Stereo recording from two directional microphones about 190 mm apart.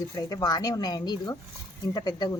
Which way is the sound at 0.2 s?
20° left (ahead or behind).